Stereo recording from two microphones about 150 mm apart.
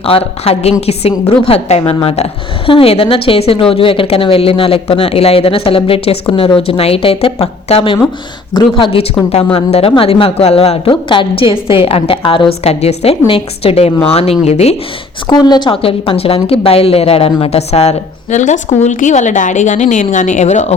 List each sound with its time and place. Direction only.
0.1 s a woman's voice: 40° left (ahead or behind)
12.6 s a woman's voice: 45° left (ahead or behind)
15.3 s a woman's voice: 30° left (ahead or behind); by 20.7 s 50° left (ahead or behind)